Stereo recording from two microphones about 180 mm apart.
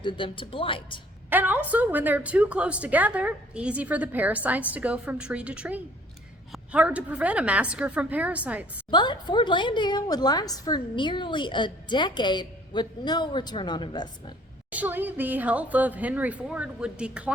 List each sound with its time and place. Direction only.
0.0 s a woman's voice: 30° left (ahead or behind)
1.3 s a woman's voice: 10° right (ahead or behind)
8.9 s a woman's voice: 25° left (ahead or behind)
14.7 s a woman's voice: 10° right (ahead or behind)